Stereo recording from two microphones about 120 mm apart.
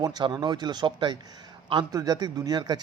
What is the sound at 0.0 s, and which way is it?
A man's voice, 35° right (ahead or behind).